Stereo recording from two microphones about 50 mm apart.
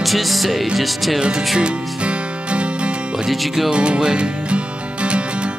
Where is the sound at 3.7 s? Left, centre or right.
Right.